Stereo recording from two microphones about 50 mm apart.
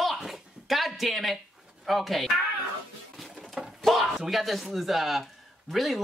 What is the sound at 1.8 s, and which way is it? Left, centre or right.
Speech, centre.